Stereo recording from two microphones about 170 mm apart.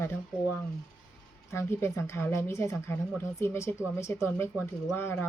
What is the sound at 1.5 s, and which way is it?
Speech, 15° left (ahead or behind).